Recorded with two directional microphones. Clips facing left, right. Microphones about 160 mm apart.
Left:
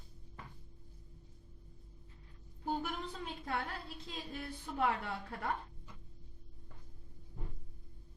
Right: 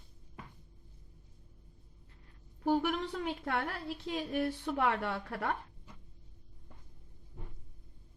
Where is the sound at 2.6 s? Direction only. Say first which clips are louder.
Right 8 dB; 75° right (ahead or behind).